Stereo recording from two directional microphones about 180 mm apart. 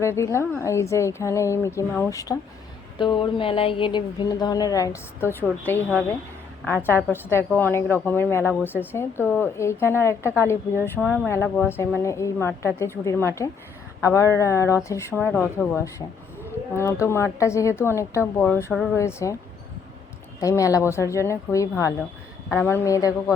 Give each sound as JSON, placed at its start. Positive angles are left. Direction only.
{"t": 0.0, "sound": "speech", "side_deg": 15}
{"t": 6.8, "sound": "speech", "side_deg": 15}
{"t": 18.7, "sound": "speech", "side_deg": 0}
{"t": 18.9, "sound": "speech", "side_deg": 15}
{"t": 20.4, "sound": "speech", "side_deg": 20}